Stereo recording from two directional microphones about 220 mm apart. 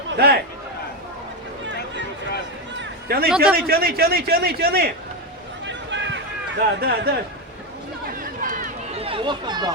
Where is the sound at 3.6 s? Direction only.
45° right (ahead or behind).